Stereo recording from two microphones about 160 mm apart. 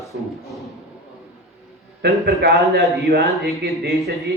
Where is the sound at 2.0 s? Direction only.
90° right.